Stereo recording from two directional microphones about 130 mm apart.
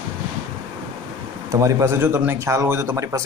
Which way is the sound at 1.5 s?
25° right (ahead or behind).